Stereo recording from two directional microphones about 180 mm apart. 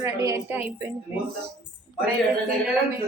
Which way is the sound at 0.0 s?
15° right (ahead or behind).